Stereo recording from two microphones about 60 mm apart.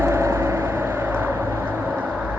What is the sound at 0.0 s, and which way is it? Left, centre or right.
Vehicle, right.